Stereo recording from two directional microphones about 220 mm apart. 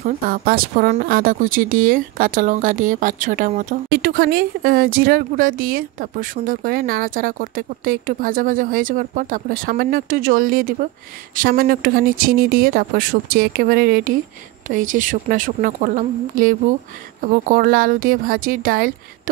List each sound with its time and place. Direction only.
0.0 s speech: 40° right (ahead or behind)